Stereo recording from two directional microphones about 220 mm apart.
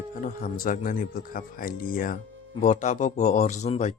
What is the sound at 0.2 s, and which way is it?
Speech, 35° left (ahead or behind).